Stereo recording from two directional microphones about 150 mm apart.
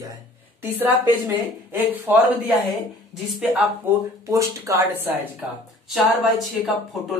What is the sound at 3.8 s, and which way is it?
Speech, 20° right (ahead or behind).